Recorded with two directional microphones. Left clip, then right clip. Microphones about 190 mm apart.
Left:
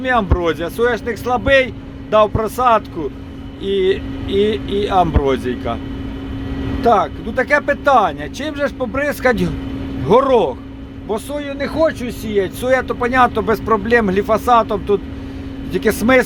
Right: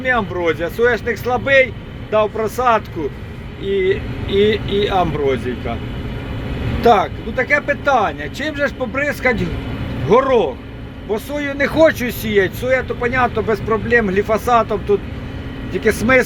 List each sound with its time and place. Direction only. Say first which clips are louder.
0.0 s speech: left 1 dB; 15° left (ahead or behind)
5.2 s speech: left 1 dB; 25° left (ahead or behind)
6.8 s speech: right 1 dB; 5° left (ahead or behind)
7.3 s speech: left 1 dB; 20° left (ahead or behind)
11.3 s speech: right 5 dB; 10° right (ahead or behind)
12.6 s speech: left 1 dB; 20° left (ahead or behind)